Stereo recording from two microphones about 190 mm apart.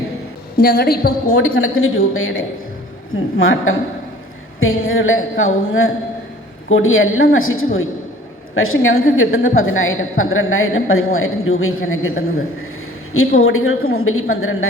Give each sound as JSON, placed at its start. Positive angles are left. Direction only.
{"t": 0.5, "sound": "a woman's voice", "side_deg": 50}
{"t": 1.4, "sound": "a woman's voice", "side_deg": 90}
{"t": 4.8, "sound": "a woman's voice", "side_deg": 90}